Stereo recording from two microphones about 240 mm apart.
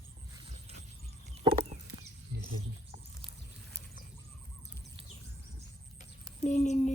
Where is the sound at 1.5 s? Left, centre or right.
Right.